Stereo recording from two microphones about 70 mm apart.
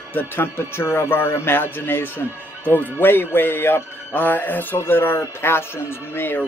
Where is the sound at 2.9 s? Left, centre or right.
Left.